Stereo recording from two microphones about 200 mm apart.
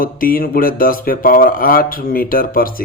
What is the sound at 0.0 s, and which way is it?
Speech, 45° left (ahead or behind).